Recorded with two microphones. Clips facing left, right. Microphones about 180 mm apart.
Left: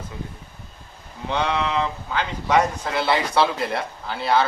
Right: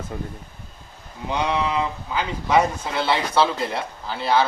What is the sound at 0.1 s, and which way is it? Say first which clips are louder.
Speech: right 4 dB; 50° right (ahead or behind).